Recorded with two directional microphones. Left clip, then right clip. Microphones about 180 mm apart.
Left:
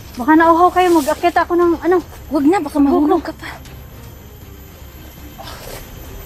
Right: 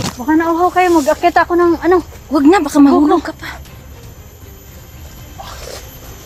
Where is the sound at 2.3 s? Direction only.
20° right (ahead or behind).